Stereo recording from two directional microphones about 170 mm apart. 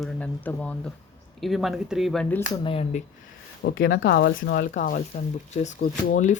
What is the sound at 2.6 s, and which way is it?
Speech, 35° left (ahead or behind).